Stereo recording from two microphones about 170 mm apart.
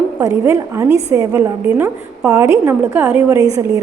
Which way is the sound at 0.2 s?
15° right (ahead or behind).